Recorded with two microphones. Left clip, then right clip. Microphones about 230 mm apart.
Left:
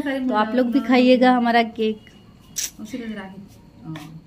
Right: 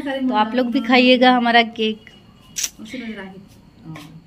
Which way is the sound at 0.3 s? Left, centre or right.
Centre.